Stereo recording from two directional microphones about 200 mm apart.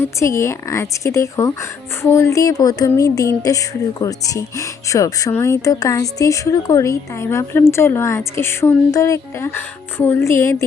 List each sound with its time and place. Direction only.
0.0 s speech: 15° left (ahead or behind)